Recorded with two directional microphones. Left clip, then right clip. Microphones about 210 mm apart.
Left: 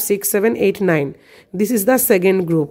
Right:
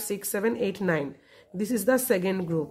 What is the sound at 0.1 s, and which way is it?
A woman's voice, 40° left (ahead or behind).